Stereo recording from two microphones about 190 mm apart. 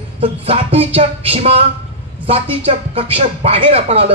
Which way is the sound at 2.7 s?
30° right (ahead or behind).